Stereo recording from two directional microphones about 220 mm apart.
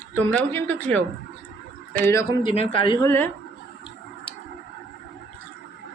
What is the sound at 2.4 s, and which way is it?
Speech, 25° left (ahead or behind).